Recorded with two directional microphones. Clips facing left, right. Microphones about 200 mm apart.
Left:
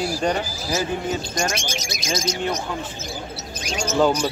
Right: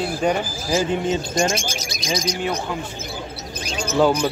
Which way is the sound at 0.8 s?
25° right (ahead or behind).